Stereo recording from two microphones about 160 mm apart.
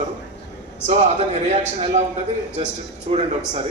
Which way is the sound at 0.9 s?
45° right (ahead or behind).